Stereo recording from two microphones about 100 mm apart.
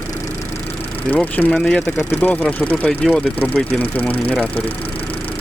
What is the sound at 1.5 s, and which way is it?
Speech, 5° left (ahead or behind).